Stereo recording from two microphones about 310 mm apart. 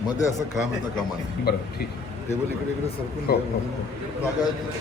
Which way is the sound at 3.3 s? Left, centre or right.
Left.